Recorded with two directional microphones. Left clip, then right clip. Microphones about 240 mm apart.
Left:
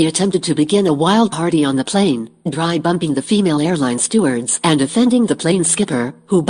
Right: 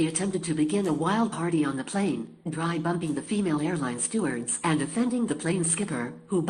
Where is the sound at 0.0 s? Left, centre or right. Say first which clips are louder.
Left 12 dB; left.